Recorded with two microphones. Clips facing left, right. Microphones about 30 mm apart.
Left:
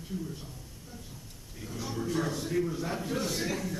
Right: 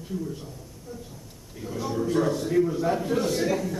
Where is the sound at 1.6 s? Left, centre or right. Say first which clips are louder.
Right 7 dB; centre.